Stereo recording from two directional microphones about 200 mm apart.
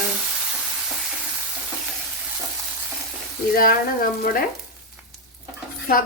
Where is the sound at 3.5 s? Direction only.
45° left (ahead or behind).